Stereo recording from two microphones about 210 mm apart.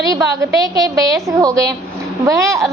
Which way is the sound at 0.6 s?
15° right (ahead or behind).